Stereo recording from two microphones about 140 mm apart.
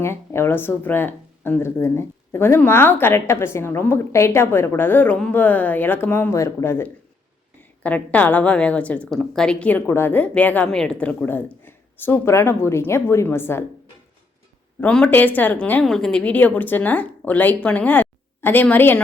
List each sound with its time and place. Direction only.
0.0 s speech: 20° left (ahead or behind)
14.8 s speech: 10° left (ahead or behind)